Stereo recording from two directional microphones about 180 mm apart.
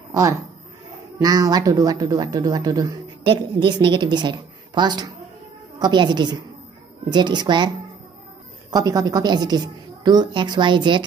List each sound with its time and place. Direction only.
0.1 s a woman's voice: 15° right (ahead or behind)